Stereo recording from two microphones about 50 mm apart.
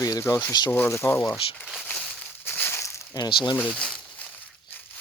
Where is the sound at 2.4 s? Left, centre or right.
Left.